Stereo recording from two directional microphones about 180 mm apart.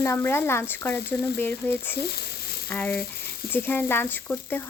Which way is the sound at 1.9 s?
60° left (ahead or behind).